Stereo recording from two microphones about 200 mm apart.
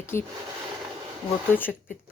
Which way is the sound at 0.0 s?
10° left (ahead or behind).